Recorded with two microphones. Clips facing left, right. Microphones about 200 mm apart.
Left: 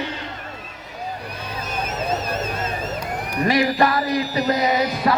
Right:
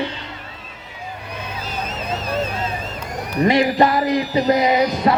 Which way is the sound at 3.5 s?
20° right (ahead or behind).